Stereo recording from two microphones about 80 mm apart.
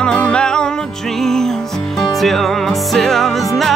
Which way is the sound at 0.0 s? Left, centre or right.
Centre.